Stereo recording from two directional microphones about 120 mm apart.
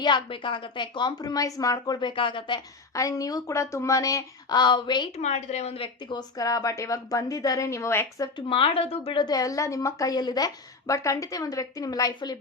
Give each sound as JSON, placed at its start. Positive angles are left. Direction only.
{"t": 0.0, "sound": "speech", "side_deg": 40}
{"t": 2.9, "sound": "a woman's voice", "side_deg": 25}
{"t": 5.1, "sound": "speech", "side_deg": 70}
{"t": 8.4, "sound": "speech", "side_deg": 45}
{"t": 9.2, "sound": "a woman's voice", "side_deg": 30}